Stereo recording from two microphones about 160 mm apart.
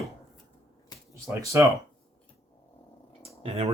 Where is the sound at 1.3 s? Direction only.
20° right (ahead or behind).